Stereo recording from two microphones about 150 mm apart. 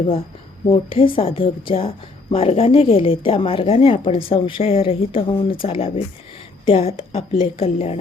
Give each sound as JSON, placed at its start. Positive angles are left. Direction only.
{"t": 0.7, "sound": "speech", "side_deg": 35}